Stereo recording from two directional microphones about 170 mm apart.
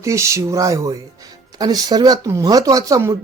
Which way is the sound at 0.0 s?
20° right (ahead or behind).